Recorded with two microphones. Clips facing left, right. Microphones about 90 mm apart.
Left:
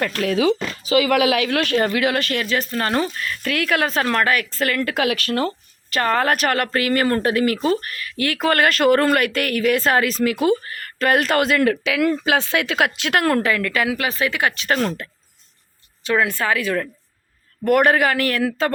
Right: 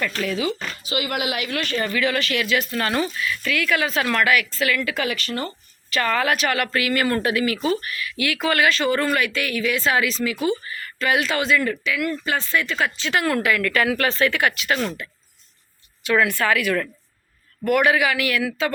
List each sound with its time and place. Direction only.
0.0 s speech: 50° left (ahead or behind)
1.5 s speech: 80° left; by 3.9 s 55° left (ahead or behind)
3.9 s speech: 35° left (ahead or behind)
5.0 s speech: 70° left (ahead or behind)
5.9 s speech: 40° left (ahead or behind)
13.4 s a woman's voice: 25° left (ahead or behind)
14.5 s speech: 40° left (ahead or behind)
16.0 s a woman's voice: 25° left (ahead or behind)
17.7 s speech: 45° left (ahead or behind)